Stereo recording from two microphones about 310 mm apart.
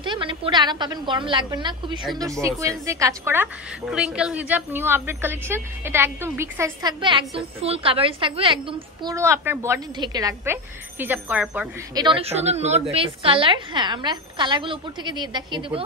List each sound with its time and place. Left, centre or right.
0.0 s a woman's voice: centre